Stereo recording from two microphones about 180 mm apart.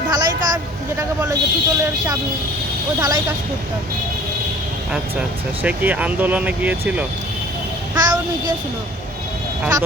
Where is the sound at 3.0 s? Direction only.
20° right (ahead or behind).